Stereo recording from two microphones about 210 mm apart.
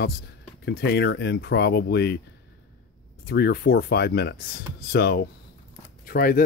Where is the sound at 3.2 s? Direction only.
50° left (ahead or behind).